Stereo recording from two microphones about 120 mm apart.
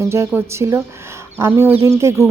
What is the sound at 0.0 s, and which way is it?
A woman's voice, 20° right (ahead or behind).